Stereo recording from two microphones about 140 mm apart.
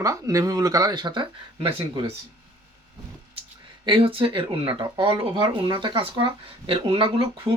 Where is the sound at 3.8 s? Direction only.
40° right (ahead or behind).